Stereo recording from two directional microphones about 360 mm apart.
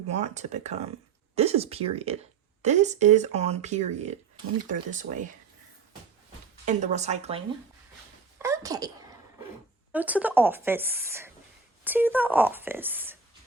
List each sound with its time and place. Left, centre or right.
0.1 s speech: centre
6.7 s a woman's voice: centre
9.9 s a woman's voice: centre